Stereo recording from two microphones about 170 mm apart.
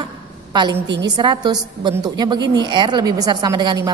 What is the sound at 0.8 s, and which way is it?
Speech, 90° right.